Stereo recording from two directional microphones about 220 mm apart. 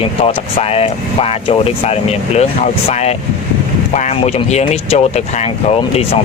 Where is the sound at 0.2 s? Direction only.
25° left (ahead or behind).